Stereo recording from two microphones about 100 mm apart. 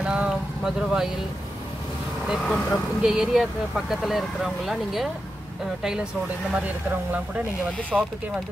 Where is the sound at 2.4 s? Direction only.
5° left (ahead or behind).